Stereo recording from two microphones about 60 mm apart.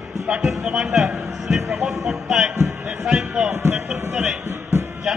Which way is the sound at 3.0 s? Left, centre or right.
Centre.